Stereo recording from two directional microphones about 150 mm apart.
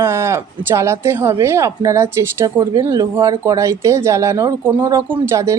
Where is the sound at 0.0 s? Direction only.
15° right (ahead or behind).